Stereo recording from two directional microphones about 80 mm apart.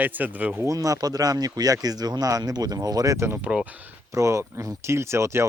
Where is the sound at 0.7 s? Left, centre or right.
Right.